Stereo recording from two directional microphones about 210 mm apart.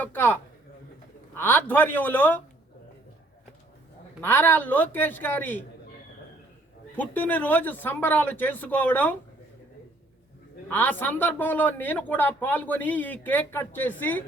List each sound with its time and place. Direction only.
0.0 s speech: 10° left (ahead or behind)
1.4 s speech: 10° left (ahead or behind)
4.2 s speech: 10° left (ahead or behind)
6.9 s speech: 10° left (ahead or behind)
10.7 s speech: 10° left (ahead or behind)